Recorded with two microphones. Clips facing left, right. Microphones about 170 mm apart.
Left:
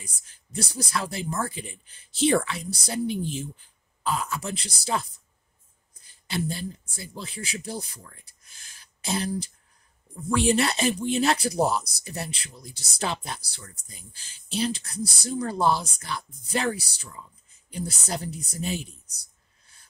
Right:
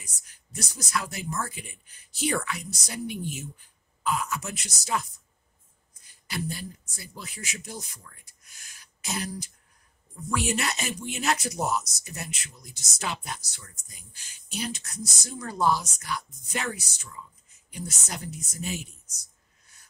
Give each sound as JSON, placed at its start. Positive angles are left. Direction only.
{"t": 0.0, "sound": "speech", "side_deg": 30}
{"t": 6.2, "sound": "speech", "side_deg": 25}